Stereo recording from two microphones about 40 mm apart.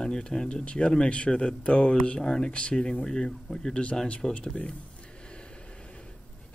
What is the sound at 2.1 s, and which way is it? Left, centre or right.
A man's voice, centre.